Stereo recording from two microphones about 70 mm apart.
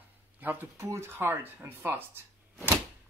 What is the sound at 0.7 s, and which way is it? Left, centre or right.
Speech, right.